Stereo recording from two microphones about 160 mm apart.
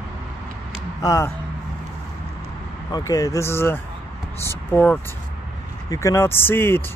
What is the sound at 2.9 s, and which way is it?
Speech, 25° left (ahead or behind).